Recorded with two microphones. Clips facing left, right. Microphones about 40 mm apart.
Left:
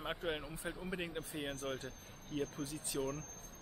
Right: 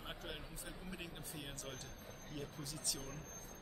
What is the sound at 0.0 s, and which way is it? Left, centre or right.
Speech, left.